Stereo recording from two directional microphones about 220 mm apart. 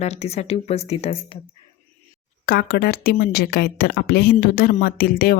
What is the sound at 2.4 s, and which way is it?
A woman's voice, 45° left (ahead or behind).